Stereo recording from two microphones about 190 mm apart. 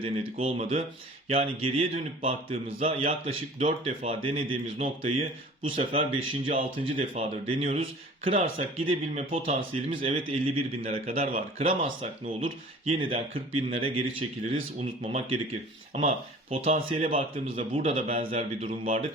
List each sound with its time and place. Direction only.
0.0 s a man's voice: 30° right (ahead or behind)